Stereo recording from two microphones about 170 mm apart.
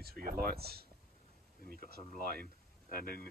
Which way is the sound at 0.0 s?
60° right (ahead or behind).